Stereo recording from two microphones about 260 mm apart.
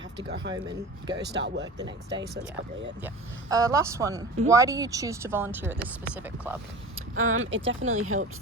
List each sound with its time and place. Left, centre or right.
0.2 s speech: right
1.6 s speech: centre
3.5 s speech: centre
6.9 s speech: right